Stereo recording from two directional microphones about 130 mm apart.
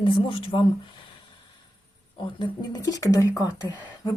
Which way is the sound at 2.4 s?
30° left (ahead or behind).